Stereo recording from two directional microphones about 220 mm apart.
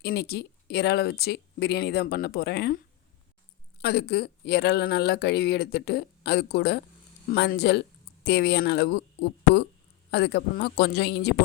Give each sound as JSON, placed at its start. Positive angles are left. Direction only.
{"t": 0.0, "sound": "a woman's voice", "side_deg": 45}
{"t": 10.1, "sound": "a woman's voice", "side_deg": 50}